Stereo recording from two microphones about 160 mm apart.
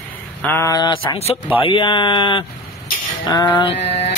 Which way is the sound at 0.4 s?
15° left (ahead or behind).